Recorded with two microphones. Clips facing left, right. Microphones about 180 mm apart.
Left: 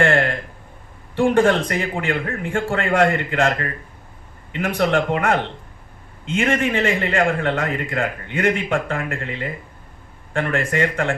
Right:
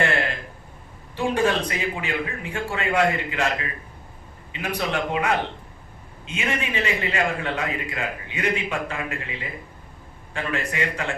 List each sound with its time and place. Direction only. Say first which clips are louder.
1.1 s a man's voice: left 6 dB; 50° left (ahead or behind)
4.8 s a man's voice: left 6 dB; 50° left (ahead or behind)